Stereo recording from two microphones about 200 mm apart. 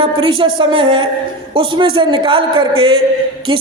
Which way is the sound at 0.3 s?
25° right (ahead or behind).